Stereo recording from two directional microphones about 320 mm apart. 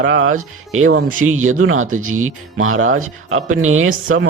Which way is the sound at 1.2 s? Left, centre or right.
Right.